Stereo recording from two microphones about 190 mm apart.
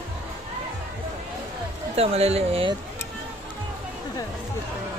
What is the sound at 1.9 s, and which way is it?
Speech, 30° right (ahead or behind).